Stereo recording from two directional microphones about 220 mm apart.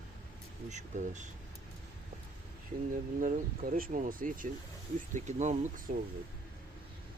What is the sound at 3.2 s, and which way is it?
Speech, 40° right (ahead or behind).